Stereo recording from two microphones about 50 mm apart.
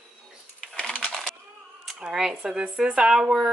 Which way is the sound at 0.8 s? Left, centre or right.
Centre.